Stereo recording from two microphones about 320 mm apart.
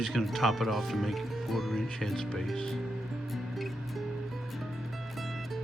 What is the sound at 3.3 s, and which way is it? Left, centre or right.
Music, centre.